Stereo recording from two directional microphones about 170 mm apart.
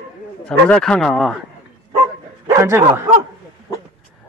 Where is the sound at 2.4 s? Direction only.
15° right (ahead or behind).